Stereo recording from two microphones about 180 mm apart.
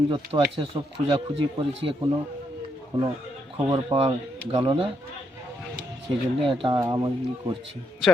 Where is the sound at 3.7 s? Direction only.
30° right (ahead or behind).